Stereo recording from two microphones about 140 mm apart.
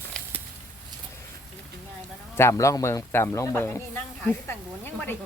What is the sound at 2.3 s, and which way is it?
A man's voice, 20° left (ahead or behind).